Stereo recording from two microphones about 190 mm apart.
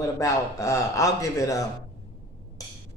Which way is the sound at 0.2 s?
15° left (ahead or behind).